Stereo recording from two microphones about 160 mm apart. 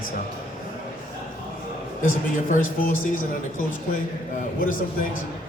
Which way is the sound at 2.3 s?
55° left (ahead or behind).